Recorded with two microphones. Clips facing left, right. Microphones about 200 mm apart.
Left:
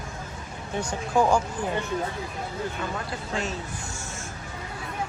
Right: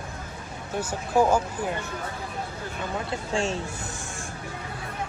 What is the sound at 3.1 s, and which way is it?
Speech, 30° right (ahead or behind).